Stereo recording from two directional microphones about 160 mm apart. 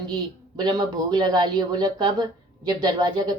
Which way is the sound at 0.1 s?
25° right (ahead or behind).